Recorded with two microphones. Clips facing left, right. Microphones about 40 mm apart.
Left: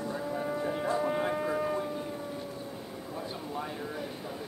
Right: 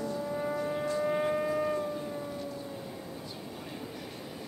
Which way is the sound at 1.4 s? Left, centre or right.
Centre.